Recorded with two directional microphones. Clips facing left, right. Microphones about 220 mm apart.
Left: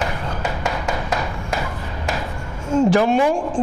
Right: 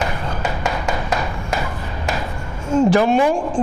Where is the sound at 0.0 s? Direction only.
20° right (ahead or behind).